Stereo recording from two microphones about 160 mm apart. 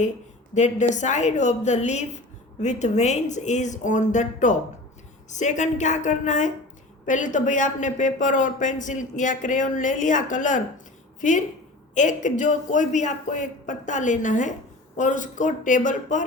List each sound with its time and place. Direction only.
0.5 s a woman's voice: 45° left (ahead or behind)